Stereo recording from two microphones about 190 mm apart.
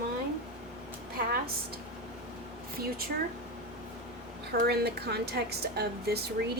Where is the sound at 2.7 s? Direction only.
50° right (ahead or behind).